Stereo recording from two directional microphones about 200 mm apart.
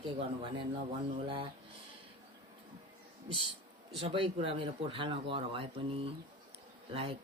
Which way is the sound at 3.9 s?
25° right (ahead or behind).